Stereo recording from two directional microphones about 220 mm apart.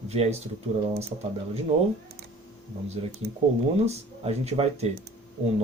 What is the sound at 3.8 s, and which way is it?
Speech, 30° right (ahead or behind).